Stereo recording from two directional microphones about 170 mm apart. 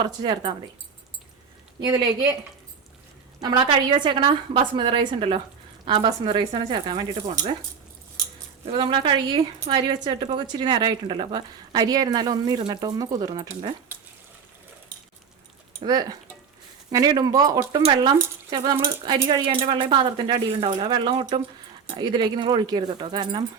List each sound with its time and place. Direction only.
0.2 s a woman's voice: 25° right (ahead or behind)
1.8 s a woman's voice: 20° right (ahead or behind)
3.4 s a woman's voice: 30° right (ahead or behind)
8.6 s a woman's voice: 30° right (ahead or behind)
15.8 s a woman's voice: 25° right (ahead or behind)